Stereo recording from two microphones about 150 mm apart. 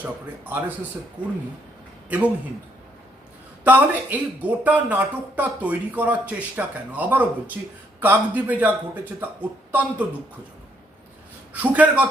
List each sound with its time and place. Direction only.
0.0 s a man's voice: 10° right (ahead or behind)
3.6 s speech: 10° right (ahead or behind)
11.5 s speech: 10° right (ahead or behind)